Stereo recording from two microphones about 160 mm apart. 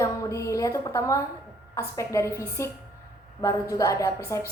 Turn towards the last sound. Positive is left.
turn(degrees=20)  # may be behind; listen again after turning